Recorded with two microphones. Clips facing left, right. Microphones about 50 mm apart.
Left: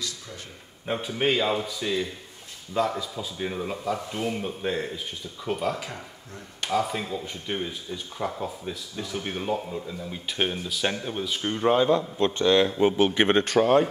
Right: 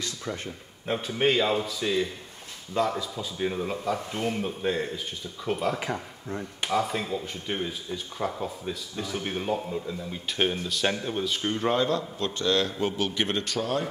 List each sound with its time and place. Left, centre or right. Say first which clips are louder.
0.8 s speech: even; centre
5.8 s speech: right 5 dB; right
6.6 s speech: left 1 dB; centre
11.7 s a man's voice: left 4 dB; centre; by 13.8 s left